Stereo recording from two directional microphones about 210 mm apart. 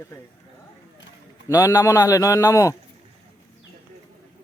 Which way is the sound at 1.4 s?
15° left (ahead or behind).